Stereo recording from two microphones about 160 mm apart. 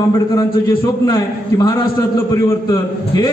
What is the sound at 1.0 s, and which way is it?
A man's voice, 25° left (ahead or behind).